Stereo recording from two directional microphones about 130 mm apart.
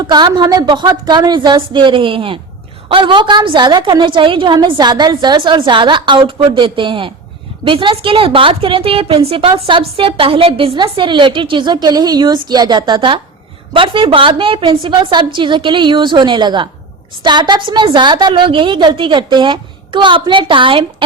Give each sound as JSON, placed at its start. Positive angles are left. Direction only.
{"t": 0.0, "sound": "a woman's voice", "side_deg": -35}